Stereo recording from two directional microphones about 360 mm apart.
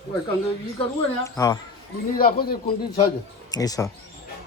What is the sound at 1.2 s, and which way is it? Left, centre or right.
Speech, centre.